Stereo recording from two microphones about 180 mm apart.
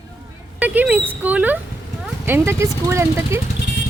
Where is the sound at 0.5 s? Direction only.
10° right (ahead or behind).